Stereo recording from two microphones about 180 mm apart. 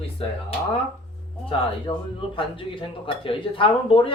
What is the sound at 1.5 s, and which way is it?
Speech, 30° left (ahead or behind).